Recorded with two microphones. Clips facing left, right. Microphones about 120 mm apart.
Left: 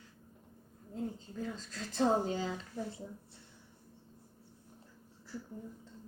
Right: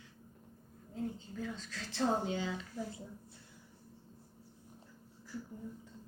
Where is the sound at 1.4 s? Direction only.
40° left (ahead or behind).